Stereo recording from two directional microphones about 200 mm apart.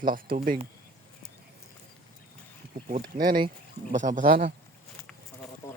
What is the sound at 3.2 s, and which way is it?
Speech, 50° right (ahead or behind).